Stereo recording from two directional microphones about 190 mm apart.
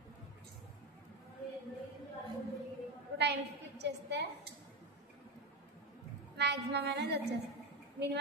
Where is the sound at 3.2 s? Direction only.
65° right (ahead or behind).